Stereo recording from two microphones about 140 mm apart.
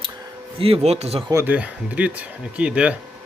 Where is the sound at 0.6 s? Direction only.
45° right (ahead or behind).